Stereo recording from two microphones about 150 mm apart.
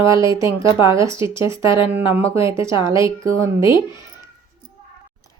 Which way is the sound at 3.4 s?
20° right (ahead or behind).